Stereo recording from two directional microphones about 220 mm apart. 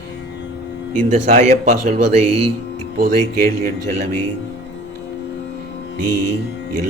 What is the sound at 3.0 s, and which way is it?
Speech, 40° right (ahead or behind).